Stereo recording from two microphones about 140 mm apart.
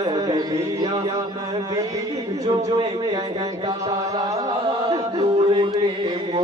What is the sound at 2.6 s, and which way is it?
A man's voice, 30° right (ahead or behind).